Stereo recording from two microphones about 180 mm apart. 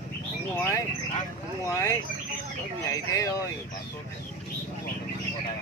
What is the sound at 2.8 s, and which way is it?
Speech, 15° left (ahead or behind).